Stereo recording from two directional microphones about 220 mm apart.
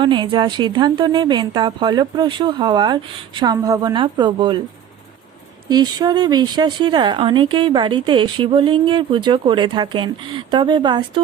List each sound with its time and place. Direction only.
0.0 s speech: 20° right (ahead or behind)
5.6 s speech: 20° right (ahead or behind)